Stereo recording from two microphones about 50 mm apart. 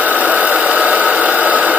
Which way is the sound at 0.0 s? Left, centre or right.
Right.